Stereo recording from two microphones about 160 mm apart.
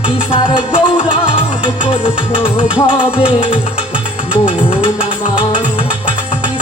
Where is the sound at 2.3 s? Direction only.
30° left (ahead or behind).